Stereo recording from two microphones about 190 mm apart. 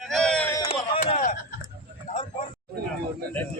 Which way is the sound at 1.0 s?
35° left (ahead or behind).